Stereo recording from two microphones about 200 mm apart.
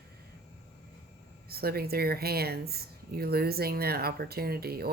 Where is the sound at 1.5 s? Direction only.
50° right (ahead or behind).